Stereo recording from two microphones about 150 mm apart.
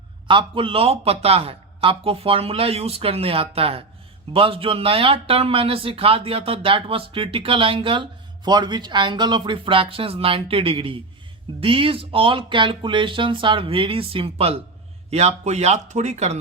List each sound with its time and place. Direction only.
0.3 s speech: 35° right (ahead or behind)